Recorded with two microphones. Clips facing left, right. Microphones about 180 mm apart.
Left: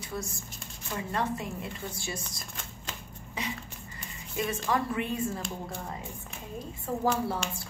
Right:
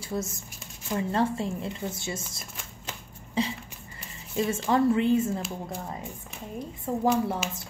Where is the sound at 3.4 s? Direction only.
30° right (ahead or behind).